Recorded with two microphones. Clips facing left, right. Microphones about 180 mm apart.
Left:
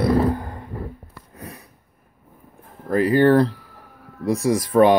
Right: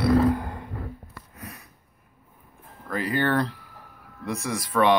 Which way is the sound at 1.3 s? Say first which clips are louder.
Left 5 dB; 30° left (ahead or behind).